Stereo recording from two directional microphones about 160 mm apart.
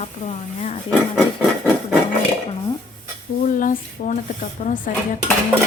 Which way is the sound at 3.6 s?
55° left (ahead or behind).